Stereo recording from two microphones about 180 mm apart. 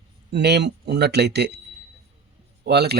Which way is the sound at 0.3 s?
70° right (ahead or behind).